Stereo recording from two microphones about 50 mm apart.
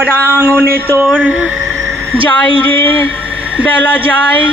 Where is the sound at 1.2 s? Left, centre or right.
Centre.